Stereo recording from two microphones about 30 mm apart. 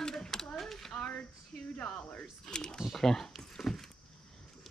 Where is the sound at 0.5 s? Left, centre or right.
Centre.